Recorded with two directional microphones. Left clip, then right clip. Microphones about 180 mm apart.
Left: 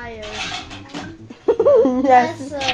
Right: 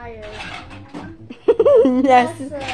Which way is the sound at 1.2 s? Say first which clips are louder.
Right 1 dB; 35° right (ahead or behind).